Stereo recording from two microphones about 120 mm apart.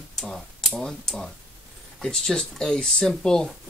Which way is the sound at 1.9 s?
5° left (ahead or behind).